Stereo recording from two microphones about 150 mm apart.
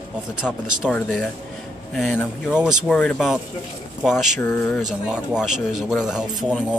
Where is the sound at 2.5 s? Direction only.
5° right (ahead or behind).